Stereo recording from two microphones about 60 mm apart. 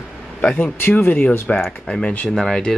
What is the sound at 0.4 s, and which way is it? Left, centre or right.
Speech, left.